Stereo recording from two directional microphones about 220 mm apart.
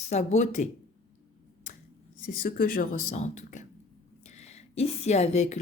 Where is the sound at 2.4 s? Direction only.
40° left (ahead or behind).